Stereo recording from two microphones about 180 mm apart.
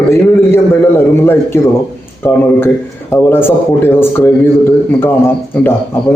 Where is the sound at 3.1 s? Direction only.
10° left (ahead or behind).